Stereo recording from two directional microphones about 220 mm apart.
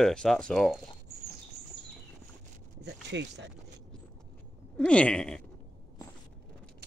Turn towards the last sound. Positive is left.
turn(degrees=5)  # may be behind; listen again after turning